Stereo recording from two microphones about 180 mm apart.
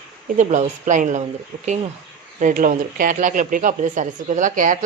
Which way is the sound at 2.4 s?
45° right (ahead or behind).